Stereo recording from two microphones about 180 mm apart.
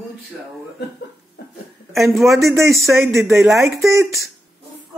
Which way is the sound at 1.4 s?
60° left (ahead or behind).